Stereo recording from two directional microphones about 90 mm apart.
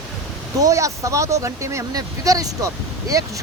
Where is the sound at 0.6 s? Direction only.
35° right (ahead or behind).